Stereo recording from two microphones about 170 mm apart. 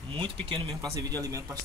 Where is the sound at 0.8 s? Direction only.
20° right (ahead or behind).